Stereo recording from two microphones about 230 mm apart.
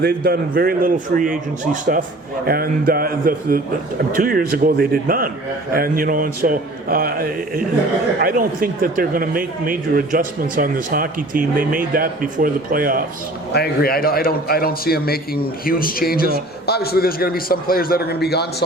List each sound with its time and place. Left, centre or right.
0.0 s speech: right
13.5 s a man's voice: left